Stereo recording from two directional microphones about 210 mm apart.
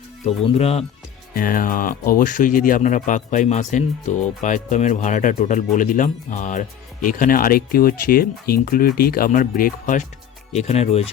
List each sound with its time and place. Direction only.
0.3 s speech: 30° left (ahead or behind)
1.4 s speech: 40° left (ahead or behind)